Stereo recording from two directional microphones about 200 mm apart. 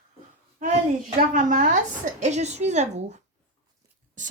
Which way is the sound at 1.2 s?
40° right (ahead or behind).